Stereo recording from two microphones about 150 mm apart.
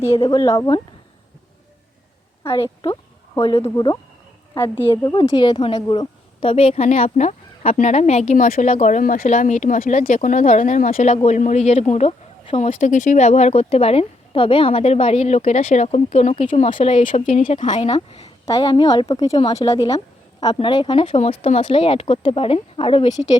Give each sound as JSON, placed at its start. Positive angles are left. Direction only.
{"t": 0.3, "sound": "speech", "side_deg": 20}
{"t": 2.4, "sound": "a woman's voice", "side_deg": 20}
{"t": 5.0, "sound": "a woman's voice", "side_deg": 30}
{"t": 16.6, "sound": "speech", "side_deg": 35}
{"t": 17.2, "sound": "speech", "side_deg": 55}
{"t": 17.7, "sound": "a woman's voice", "side_deg": 40}
{"t": 18.4, "sound": "speech", "side_deg": 25}